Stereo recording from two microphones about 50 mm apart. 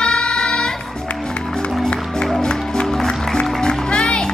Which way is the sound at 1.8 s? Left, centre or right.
Centre.